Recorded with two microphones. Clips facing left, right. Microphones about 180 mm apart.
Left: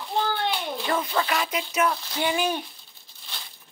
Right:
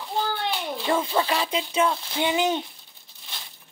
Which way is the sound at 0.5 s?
10° right (ahead or behind).